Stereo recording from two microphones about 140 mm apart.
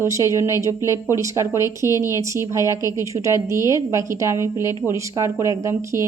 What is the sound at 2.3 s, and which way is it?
Speech, 20° right (ahead or behind).